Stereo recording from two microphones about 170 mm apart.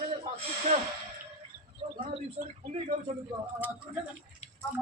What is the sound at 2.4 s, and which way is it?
Speech, 45° right (ahead or behind).